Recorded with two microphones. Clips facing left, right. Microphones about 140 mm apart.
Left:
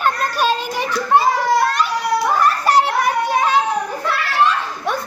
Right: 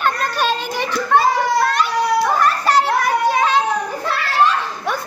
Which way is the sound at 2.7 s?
15° left (ahead or behind).